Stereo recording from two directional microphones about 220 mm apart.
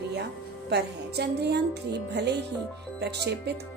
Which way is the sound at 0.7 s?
50° right (ahead or behind).